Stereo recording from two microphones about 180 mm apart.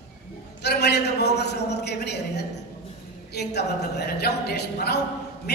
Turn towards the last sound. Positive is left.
turn(degrees=65)  # may be behind; listen again after turning